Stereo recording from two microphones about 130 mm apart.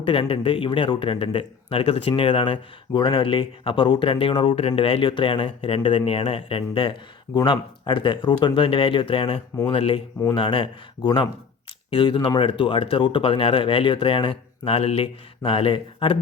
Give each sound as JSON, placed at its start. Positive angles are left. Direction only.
{"t": 0.0, "sound": "speech", "side_deg": 45}